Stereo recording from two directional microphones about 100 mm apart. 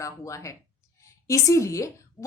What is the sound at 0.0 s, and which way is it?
A woman's voice, 30° left (ahead or behind).